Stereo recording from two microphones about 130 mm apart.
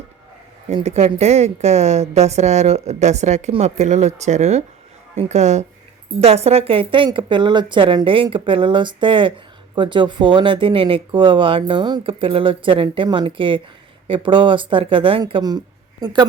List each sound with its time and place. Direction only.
0.7 s a woman's voice: 50° right (ahead or behind); by 16.2 s 30° right (ahead or behind)